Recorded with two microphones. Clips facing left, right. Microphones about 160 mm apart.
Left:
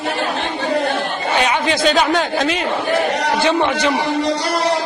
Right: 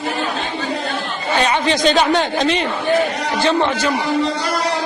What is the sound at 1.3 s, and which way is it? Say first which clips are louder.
A man's voice: right 1 dB; 10° left (ahead or behind).